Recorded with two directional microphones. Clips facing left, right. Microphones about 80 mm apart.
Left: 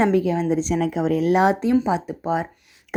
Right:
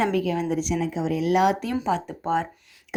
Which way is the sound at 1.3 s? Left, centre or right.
Left.